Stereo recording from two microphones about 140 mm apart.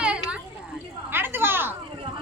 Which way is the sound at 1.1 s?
15° right (ahead or behind).